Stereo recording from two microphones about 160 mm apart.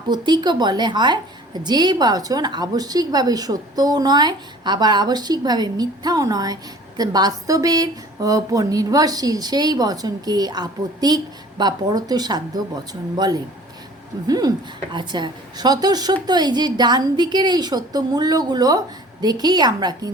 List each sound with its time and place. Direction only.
0.1 s a woman's voice: 25° right (ahead or behind)